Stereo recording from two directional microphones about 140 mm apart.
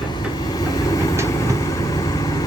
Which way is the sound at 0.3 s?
25° left (ahead or behind).